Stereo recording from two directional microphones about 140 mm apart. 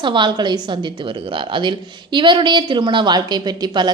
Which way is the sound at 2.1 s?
35° right (ahead or behind).